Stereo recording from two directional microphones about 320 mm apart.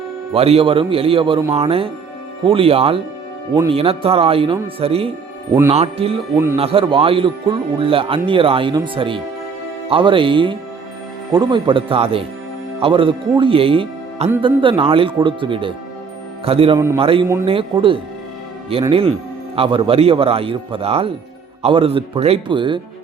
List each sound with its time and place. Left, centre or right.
0.3 s speech: centre